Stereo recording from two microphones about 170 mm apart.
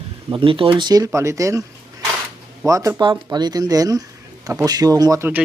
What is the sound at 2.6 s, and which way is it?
Speech, 20° right (ahead or behind).